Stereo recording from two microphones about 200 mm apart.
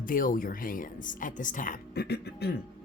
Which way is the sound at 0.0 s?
45° left (ahead or behind).